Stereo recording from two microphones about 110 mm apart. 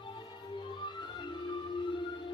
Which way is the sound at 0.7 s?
45° left (ahead or behind).